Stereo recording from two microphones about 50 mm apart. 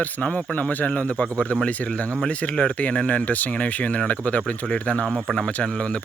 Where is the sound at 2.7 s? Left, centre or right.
Left.